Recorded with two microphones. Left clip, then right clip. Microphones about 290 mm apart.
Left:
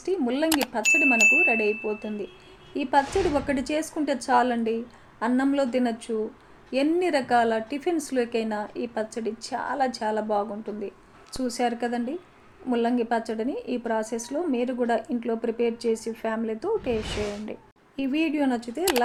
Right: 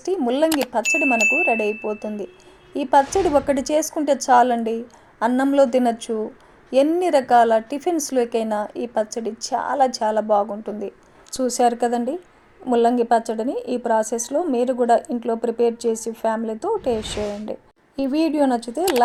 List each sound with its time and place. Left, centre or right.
0.0 s a woman's voice: right
3.0 s speech: centre
3.4 s a woman's voice: right
16.9 s speech: centre
17.5 s speech: right